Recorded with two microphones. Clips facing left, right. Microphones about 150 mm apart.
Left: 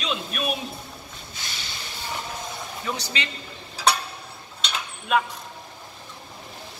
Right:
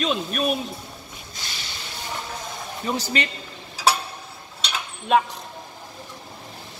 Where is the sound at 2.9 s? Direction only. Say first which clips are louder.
Right 4 dB; 35° right (ahead or behind).